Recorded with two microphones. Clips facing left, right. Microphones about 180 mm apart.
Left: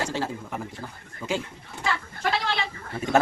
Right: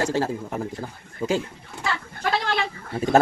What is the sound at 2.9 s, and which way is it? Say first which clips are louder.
Speech: right 4 dB; 35° right (ahead or behind).